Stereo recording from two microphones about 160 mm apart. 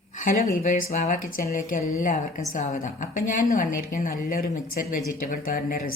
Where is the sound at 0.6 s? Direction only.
55° left (ahead or behind).